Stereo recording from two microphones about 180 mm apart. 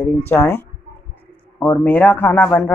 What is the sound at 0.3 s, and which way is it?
Speech, 10° left (ahead or behind).